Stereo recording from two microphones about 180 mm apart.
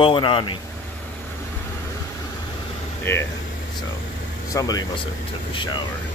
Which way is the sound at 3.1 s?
15° left (ahead or behind).